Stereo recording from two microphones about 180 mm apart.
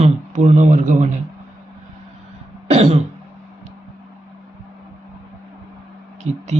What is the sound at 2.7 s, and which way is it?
Speech, 35° right (ahead or behind).